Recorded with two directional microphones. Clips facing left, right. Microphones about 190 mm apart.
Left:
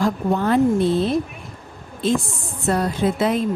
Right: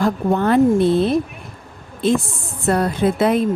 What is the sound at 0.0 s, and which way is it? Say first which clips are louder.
A woman's voice: right 2 dB; 60° right (ahead or behind).